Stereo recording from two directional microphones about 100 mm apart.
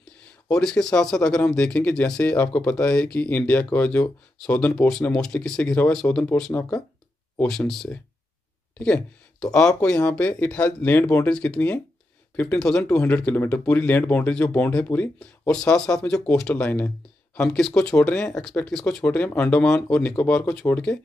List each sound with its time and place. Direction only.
0.5 s speech: 5° left (ahead or behind)